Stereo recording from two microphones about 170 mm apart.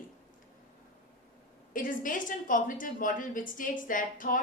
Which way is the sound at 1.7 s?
55° left (ahead or behind).